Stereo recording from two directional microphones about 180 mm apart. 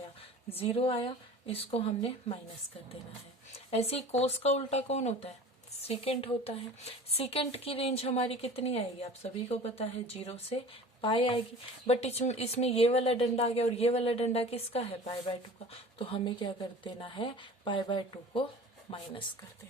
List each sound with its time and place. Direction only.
0.5 s speech: 30° left (ahead or behind)
3.7 s speech: 35° left (ahead or behind)